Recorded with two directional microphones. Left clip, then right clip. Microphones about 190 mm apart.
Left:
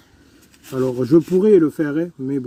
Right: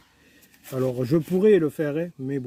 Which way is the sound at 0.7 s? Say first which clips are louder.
Left 8 dB; 45° right (ahead or behind).